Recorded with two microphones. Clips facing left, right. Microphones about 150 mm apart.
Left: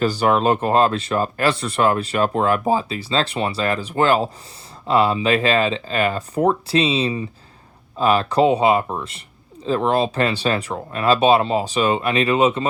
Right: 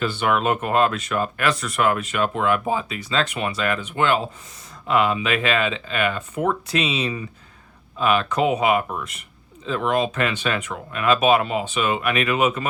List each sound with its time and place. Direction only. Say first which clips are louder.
0.0 s speech: left 4 dB; 35° left (ahead or behind)